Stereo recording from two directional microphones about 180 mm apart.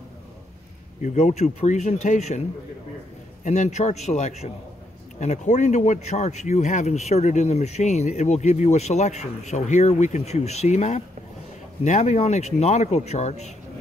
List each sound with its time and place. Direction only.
1.0 s speech: 40° left (ahead or behind)
3.4 s speech: 40° left (ahead or behind)